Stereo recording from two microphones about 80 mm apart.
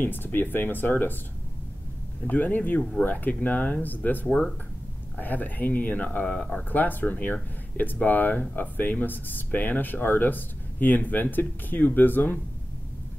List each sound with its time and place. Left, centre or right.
0.0 s speech: left
2.2 s speech: left